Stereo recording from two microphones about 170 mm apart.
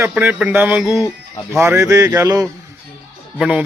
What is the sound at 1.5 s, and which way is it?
Speech, 15° right (ahead or behind).